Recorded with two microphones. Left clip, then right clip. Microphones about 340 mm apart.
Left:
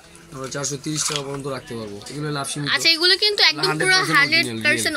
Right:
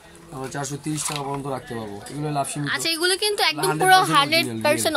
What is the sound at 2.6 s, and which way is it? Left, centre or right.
A woman's voice, centre.